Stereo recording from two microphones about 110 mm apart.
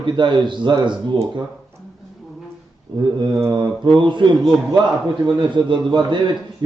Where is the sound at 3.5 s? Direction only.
45° right (ahead or behind).